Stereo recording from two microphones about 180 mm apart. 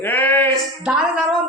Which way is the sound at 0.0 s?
10° left (ahead or behind).